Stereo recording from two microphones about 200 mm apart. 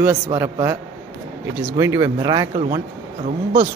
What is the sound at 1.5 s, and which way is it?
Speech, 10° right (ahead or behind).